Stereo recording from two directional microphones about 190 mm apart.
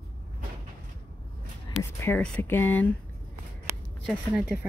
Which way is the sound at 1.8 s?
15° left (ahead or behind).